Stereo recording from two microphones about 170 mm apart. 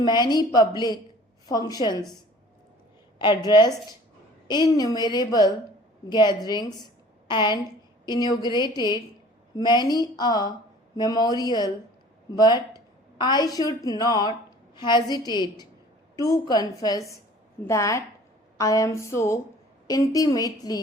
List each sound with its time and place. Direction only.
0.0 s a woman's voice: 25° left (ahead or behind)
3.2 s a woman's voice: 25° left (ahead or behind)